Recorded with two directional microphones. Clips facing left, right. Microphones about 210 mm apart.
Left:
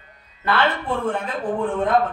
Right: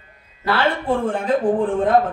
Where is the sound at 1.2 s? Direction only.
30° right (ahead or behind).